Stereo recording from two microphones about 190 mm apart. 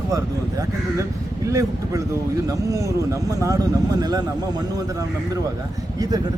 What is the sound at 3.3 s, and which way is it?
Speech, 15° right (ahead or behind).